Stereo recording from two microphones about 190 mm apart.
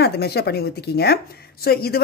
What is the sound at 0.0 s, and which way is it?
A woman's voice, 55° left (ahead or behind).